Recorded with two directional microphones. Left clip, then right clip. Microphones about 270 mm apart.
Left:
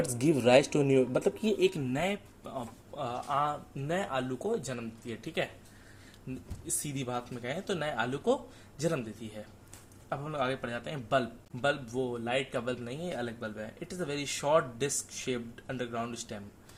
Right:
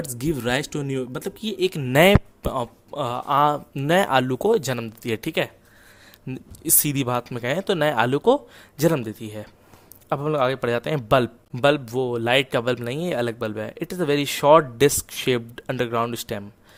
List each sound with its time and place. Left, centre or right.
0.3 s a man's voice: right
6.8 s a man's voice: right